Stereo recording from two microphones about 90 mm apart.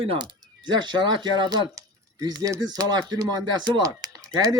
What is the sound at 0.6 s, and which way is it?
Speech, 60° right (ahead or behind).